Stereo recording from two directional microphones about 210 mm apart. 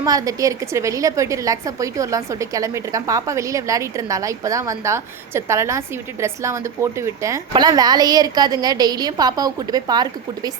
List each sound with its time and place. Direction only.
0.0 s a woman's voice: 15° right (ahead or behind)